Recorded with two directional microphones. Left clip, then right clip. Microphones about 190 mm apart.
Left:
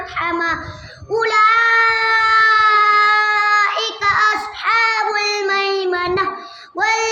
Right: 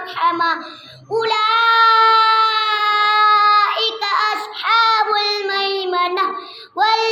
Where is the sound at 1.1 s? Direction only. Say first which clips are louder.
Left 3 dB; 20° left (ahead or behind).